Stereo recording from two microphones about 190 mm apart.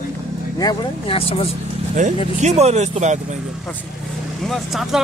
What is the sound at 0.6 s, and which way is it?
Speech, 25° left (ahead or behind).